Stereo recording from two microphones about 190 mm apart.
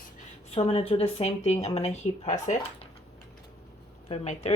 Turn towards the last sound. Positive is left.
turn(degrees=35)  # may be behind; listen again after turning